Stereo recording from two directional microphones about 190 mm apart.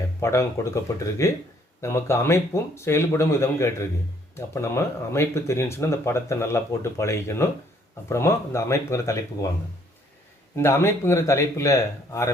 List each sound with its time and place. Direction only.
0.2 s speech: 15° left (ahead or behind)
10.5 s speech: 15° left (ahead or behind)